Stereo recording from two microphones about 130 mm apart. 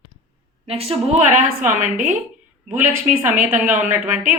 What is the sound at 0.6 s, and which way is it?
Speech, 50° right (ahead or behind).